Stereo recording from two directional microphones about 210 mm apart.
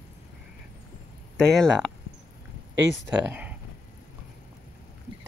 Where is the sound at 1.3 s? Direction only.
Centre (ahead or behind).